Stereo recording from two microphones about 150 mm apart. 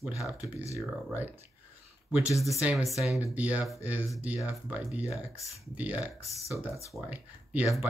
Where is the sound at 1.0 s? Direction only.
10° right (ahead or behind).